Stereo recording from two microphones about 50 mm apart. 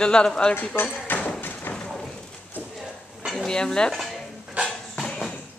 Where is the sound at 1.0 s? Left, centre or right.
Left.